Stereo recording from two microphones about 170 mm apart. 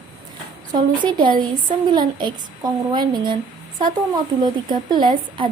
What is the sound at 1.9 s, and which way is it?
Speech, 25° right (ahead or behind).